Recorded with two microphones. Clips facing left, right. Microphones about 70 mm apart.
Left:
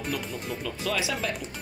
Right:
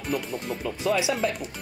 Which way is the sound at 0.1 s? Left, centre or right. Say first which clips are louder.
Right 6 dB; centre.